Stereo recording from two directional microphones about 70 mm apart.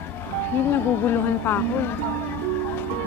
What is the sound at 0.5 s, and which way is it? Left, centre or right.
Speech, left.